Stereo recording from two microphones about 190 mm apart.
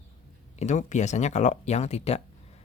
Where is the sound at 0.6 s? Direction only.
40° left (ahead or behind).